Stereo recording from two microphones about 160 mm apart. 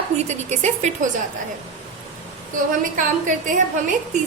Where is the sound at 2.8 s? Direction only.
55° right (ahead or behind).